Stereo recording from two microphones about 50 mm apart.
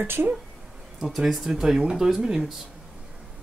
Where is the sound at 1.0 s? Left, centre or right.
Centre.